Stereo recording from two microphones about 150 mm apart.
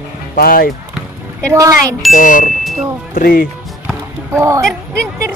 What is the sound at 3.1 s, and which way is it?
Speech, 75° left (ahead or behind).